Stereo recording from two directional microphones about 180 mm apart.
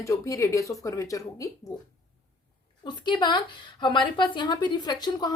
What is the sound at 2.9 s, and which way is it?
A woman's voice, 25° left (ahead or behind).